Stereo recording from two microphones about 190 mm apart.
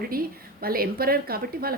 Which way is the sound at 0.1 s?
50° right (ahead or behind).